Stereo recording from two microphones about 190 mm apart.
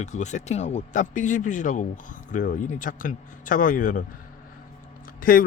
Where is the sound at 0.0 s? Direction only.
40° left (ahead or behind).